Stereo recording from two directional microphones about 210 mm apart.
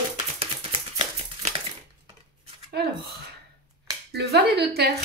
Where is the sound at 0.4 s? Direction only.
30° right (ahead or behind).